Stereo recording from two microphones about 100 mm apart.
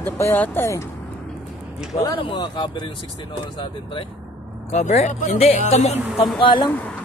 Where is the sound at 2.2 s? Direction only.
55° left (ahead or behind).